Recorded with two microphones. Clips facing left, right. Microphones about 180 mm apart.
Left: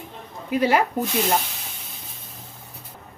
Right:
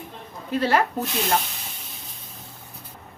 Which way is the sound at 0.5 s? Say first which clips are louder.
Left 2 dB; 15° left (ahead or behind).